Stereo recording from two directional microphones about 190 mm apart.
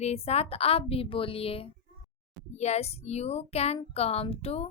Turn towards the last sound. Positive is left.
turn(degrees=30)  # may be behind; listen again after turning